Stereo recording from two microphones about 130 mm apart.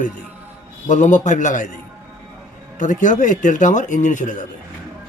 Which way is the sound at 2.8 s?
85° left.